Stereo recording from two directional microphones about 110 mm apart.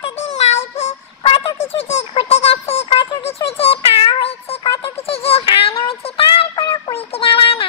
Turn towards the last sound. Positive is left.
turn(degrees=55)  # may be behind; listen again after turning